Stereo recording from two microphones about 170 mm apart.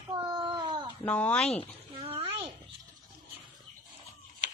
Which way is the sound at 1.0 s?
10° left (ahead or behind).